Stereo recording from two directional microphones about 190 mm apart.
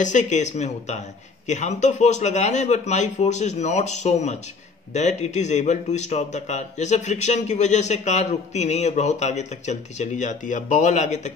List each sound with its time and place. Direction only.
0.0 s speech: 40° left (ahead or behind)